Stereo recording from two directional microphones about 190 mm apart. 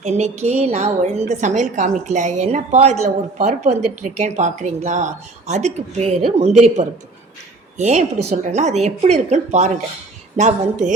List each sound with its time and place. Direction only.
0.0 s a woman's voice: 35° right (ahead or behind)